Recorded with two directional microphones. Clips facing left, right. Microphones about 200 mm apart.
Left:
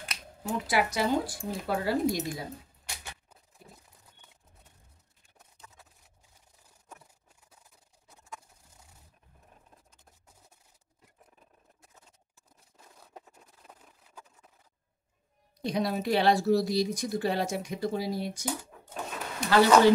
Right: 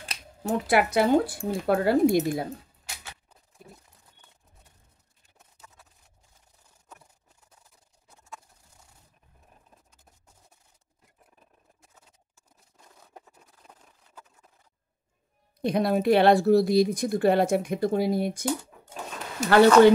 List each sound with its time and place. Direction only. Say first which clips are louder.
0.4 s speech: right 5 dB; 55° right (ahead or behind)
5.6 s a sound: right 1 dB; 5° right (ahead or behind)
15.6 s speech: right 6 dB; 55° right (ahead or behind)
19.4 s speech: right 5 dB; 55° right (ahead or behind)